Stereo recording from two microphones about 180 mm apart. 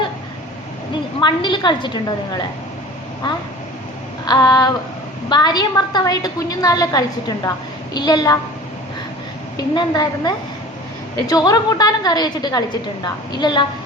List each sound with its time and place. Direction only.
1.2 s a woman's voice: 25° left (ahead or behind)
4.3 s a woman's voice: 20° left (ahead or behind)
9.6 s a woman's voice: 25° left (ahead or behind)